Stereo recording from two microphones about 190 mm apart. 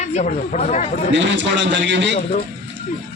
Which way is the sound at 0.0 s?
40° left (ahead or behind).